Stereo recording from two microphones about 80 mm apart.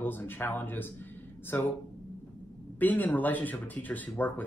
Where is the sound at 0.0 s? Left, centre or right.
Left.